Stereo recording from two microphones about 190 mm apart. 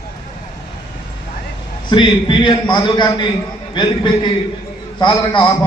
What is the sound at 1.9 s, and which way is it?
A man's voice, 25° left (ahead or behind).